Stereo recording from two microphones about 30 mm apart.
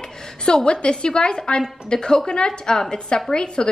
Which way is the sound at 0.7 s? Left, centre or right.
Left.